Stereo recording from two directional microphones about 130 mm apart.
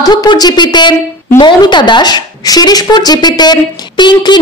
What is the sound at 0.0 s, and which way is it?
Speech, 30° left (ahead or behind).